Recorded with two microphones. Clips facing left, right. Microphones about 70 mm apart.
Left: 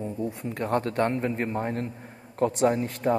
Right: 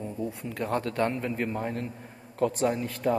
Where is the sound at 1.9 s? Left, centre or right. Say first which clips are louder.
Left 1 dB; left.